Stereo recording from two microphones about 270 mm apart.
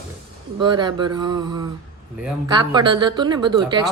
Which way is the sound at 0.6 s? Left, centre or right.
Centre.